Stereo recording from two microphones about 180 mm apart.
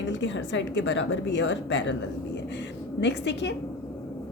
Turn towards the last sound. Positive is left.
turn(degrees=75)  # may be behind; listen again after turning